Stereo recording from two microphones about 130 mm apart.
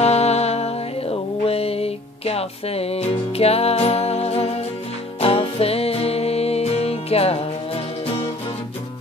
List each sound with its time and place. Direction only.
0.0 s music: 55° left (ahead or behind)